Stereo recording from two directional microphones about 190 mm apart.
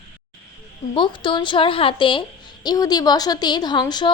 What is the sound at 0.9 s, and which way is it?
A woman's voice, 25° left (ahead or behind).